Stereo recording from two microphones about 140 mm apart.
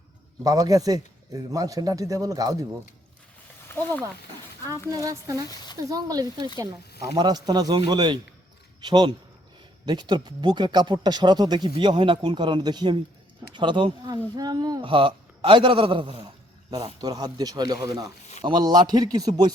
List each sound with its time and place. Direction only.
0.4 s a man's voice: 25° right (ahead or behind)
3.7 s a sound: 15° left (ahead or behind)
4.9 s a man's voice: 25° right (ahead or behind)